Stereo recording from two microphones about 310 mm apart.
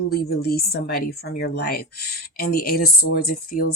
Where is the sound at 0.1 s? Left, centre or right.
Left.